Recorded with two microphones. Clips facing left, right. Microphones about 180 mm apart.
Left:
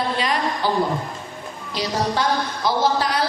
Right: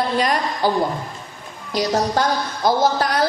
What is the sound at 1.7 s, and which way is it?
A woman's voice, 45° right (ahead or behind).